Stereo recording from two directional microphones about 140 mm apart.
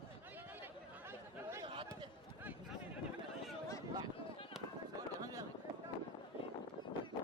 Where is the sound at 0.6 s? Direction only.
15° right (ahead or behind).